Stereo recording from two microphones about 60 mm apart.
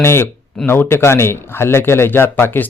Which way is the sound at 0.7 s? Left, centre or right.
Left.